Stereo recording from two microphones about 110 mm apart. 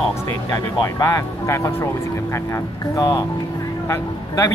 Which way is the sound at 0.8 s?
30° left (ahead or behind).